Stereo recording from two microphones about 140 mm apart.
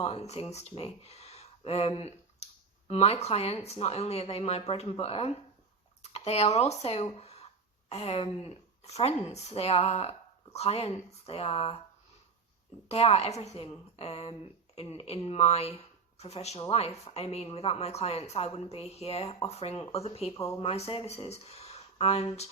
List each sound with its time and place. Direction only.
0.0 s speech: 50° left (ahead or behind)
12.9 s speech: 45° left (ahead or behind)
20.3 s speech: 25° left (ahead or behind)
20.6 s speech: 45° left (ahead or behind)